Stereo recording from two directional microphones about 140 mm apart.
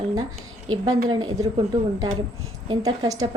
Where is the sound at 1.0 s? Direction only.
30° right (ahead or behind).